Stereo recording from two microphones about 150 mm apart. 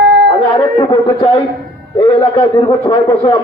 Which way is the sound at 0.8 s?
25° left (ahead or behind).